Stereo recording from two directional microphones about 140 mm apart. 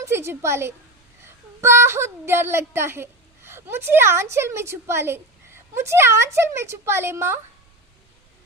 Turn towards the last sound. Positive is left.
turn(degrees=-15)  # may be behind; listen again after turning